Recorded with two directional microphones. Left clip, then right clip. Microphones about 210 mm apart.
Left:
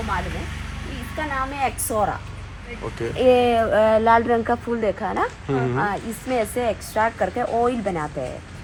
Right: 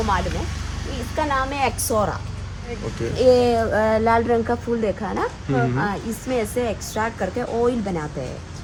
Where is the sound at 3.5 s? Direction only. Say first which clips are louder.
Left 2 dB; 30° left (ahead or behind).